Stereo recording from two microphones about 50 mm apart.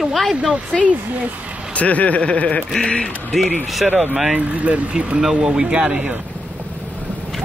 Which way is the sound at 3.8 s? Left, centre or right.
Right.